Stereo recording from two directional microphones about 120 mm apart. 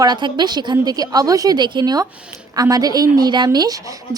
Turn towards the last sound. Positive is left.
turn(degrees=-30)  # may be behind; listen again after turning